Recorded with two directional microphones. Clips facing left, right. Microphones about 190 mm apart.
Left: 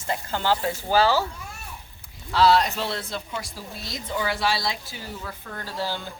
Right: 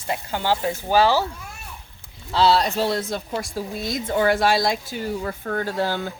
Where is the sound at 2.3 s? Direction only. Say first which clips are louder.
Right 1 dB; 30° right (ahead or behind).